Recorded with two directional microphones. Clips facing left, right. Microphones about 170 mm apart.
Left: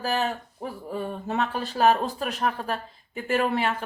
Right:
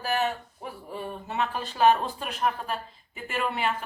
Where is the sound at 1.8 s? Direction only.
40° left (ahead or behind).